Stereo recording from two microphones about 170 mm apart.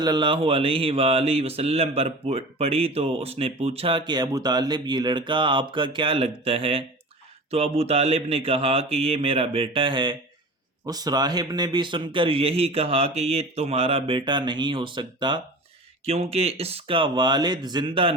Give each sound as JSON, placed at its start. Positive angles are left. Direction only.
{"t": 0.0, "sound": "speech", "side_deg": -25}